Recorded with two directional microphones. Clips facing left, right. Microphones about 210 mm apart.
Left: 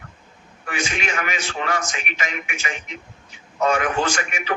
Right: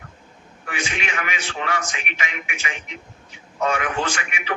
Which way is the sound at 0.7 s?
40° left (ahead or behind).